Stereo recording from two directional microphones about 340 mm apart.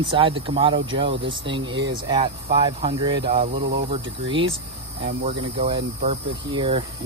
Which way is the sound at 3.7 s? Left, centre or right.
Right.